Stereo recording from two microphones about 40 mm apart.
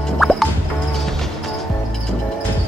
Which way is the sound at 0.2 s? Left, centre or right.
Centre.